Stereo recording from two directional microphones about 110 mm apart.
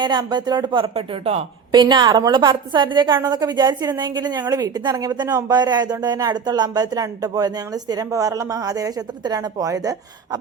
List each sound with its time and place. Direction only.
0.0 s a woman's voice: 45° right (ahead or behind)
0.9 s speech: 65° right (ahead or behind)
1.7 s a woman's voice: 40° right (ahead or behind)